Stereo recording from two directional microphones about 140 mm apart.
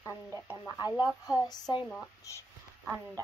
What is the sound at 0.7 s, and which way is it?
Speech, 30° left (ahead or behind).